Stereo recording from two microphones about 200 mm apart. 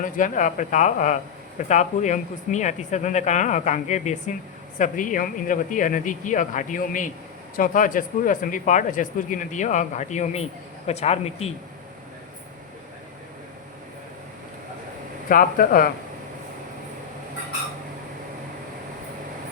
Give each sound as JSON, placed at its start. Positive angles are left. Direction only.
{"t": 0.0, "sound": "speech", "side_deg": 40}
{"t": 15.3, "sound": "speech", "side_deg": 45}